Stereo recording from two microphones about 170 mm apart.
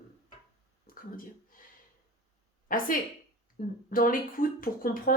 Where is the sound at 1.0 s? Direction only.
55° left (ahead or behind).